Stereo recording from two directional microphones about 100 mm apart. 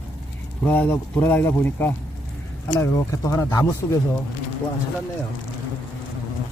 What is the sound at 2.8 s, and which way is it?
Speech, 35° left (ahead or behind).